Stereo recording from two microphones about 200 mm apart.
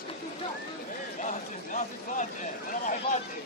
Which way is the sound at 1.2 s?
35° left (ahead or behind).